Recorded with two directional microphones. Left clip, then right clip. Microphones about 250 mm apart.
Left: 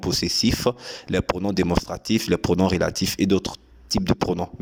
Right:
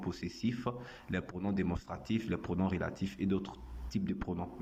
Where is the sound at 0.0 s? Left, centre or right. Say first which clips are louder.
Left 17 dB; left.